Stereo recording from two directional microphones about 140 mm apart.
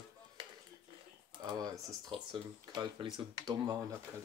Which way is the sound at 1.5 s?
25° right (ahead or behind).